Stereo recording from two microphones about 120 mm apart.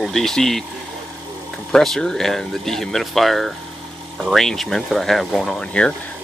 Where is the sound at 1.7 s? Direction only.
5° left (ahead or behind).